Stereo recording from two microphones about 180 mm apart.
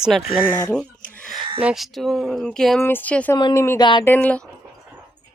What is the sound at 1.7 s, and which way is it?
Speech, centre (ahead or behind).